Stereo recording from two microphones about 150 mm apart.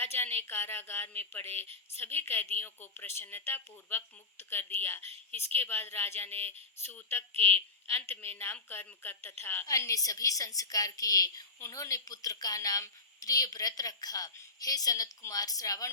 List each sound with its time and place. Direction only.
0.0 s a woman's voice: 15° left (ahead or behind)